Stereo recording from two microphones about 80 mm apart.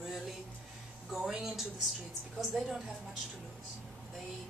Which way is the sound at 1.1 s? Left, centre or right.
Centre.